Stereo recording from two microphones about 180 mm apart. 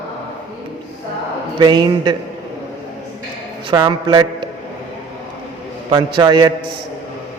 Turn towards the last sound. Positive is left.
turn(degrees=-25)  # may be behind; listen again after turning